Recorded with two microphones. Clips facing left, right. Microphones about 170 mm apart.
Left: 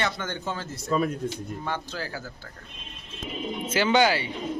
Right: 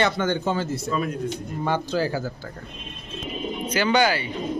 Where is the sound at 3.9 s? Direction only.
20° left (ahead or behind).